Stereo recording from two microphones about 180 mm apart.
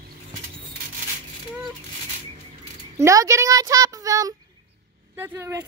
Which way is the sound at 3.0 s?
15° right (ahead or behind).